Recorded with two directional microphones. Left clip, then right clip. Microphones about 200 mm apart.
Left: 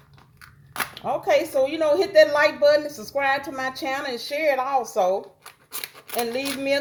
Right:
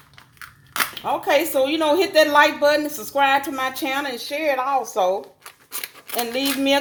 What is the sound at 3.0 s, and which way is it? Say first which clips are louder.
Speech: right 5 dB; 35° right (ahead or behind).